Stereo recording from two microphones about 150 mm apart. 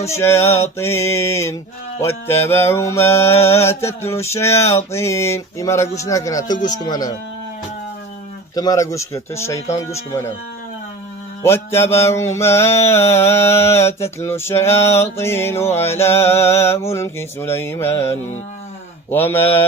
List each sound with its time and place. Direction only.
0.0 s mantra: 20° left (ahead or behind)
6.0 s speech: 20° left (ahead or behind)
8.5 s speech: 25° left (ahead or behind)
9.9 s mantra: 20° left (ahead or behind)
11.4 s mantra: 15° left (ahead or behind)